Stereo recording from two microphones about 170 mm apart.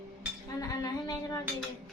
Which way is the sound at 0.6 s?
20° left (ahead or behind).